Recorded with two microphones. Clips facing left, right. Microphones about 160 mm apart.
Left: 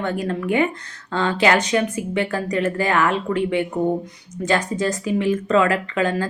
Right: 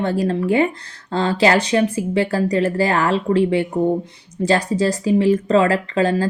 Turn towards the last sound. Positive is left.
turn(degrees=-35)  # may be behind; listen again after turning